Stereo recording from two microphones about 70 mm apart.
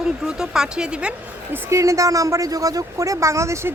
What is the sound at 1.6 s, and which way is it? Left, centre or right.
A woman's voice, right.